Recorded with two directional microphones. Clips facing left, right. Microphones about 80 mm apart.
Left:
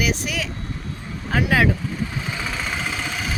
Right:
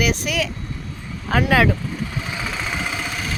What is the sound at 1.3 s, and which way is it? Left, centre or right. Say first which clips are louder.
Speech: right 2 dB; right.